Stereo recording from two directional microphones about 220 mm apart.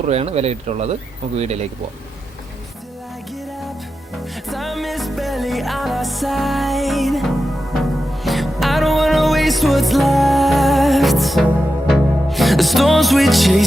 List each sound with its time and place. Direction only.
0.0 s speech: 30° right (ahead or behind)
4.4 s music: centre (ahead or behind)